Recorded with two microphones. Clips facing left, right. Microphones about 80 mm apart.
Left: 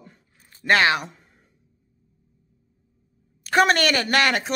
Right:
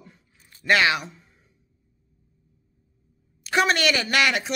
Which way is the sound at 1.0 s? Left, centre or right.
Left.